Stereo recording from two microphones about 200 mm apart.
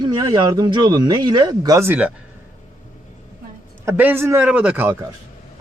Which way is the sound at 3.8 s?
10° right (ahead or behind).